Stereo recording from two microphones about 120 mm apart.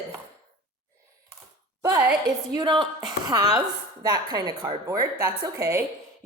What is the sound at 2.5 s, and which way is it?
A woman's voice, 35° right (ahead or behind).